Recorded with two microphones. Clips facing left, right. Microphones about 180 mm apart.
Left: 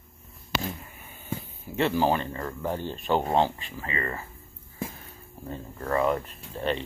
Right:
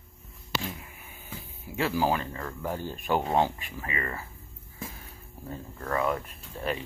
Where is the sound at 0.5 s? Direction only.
60° left (ahead or behind).